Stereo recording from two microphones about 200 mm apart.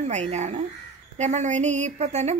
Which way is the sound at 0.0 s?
35° right (ahead or behind).